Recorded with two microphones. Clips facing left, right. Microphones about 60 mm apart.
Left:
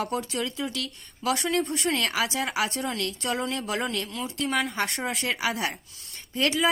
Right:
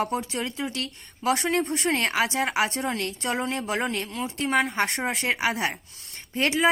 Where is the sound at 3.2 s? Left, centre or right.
Right.